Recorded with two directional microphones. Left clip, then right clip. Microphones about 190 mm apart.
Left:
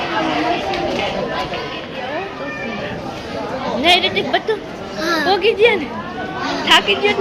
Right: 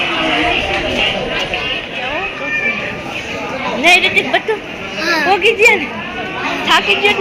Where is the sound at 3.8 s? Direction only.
Centre (ahead or behind).